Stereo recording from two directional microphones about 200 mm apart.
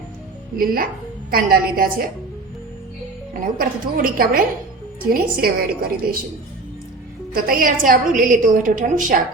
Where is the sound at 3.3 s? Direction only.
45° right (ahead or behind).